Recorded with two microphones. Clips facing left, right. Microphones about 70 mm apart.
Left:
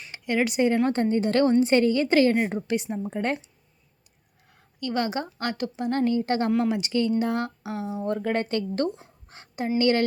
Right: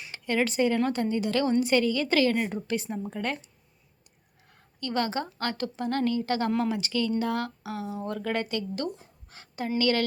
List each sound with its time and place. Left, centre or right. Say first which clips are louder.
0.1 s speech: left 2 dB; centre
0.9 s a woman's voice: left 4 dB; left; by 3.2 s centre
4.8 s a woman's voice: left 2 dB; centre; by 8.9 s left
9.0 s a sound: left 3 dB; left
9.7 s a woman's voice: left 4 dB; left